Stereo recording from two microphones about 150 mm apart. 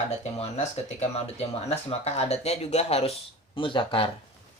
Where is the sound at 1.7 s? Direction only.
45° left (ahead or behind).